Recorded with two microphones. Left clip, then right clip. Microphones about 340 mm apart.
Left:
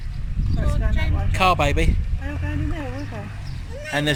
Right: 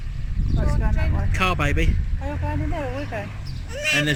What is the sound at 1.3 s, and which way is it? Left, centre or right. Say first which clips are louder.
Speech: left 5 dB; centre.